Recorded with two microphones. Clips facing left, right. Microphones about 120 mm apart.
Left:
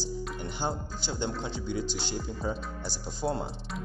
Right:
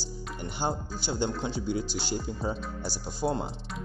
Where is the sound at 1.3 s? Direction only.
5° right (ahead or behind).